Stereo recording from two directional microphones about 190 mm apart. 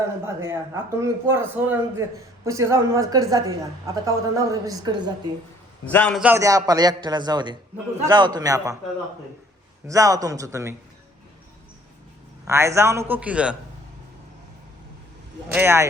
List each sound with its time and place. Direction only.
0.3 s a man's voice: 15° right (ahead or behind)
5.8 s a man's voice: 10° left (ahead or behind)
6.1 s a man's voice: 10° right (ahead or behind)
9.8 s a man's voice: 15° right (ahead or behind)
12.5 s a man's voice: 15° right (ahead or behind)
15.4 s a man's voice: 10° right (ahead or behind)